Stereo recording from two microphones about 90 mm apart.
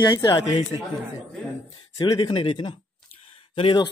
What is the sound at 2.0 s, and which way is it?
Speech, 55° left (ahead or behind).